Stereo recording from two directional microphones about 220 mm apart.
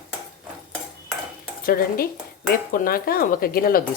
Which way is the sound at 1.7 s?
40° left (ahead or behind).